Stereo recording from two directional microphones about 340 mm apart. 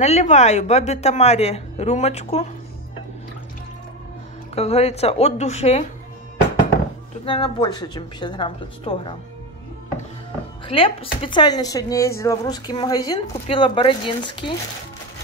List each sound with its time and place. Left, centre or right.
0.0 s a woman's voice: centre
4.6 s speech: centre
7.2 s speech: centre
10.7 s speech: centre